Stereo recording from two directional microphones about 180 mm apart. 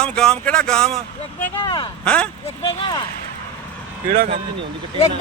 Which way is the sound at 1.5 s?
25° left (ahead or behind).